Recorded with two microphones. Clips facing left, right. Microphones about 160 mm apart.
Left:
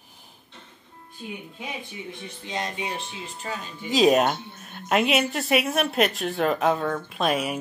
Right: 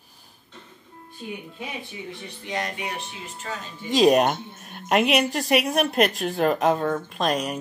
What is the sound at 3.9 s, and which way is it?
A woman's voice, centre (ahead or behind).